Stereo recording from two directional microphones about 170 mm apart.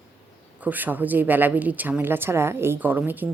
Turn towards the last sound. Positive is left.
turn(degrees=-10)  # may be behind; listen again after turning